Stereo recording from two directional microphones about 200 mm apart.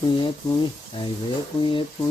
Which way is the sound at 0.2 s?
25° left (ahead or behind).